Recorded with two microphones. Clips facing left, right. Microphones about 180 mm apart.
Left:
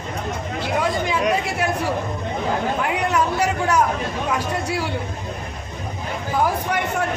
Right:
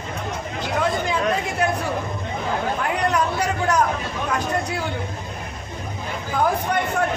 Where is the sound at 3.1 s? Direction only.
10° left (ahead or behind).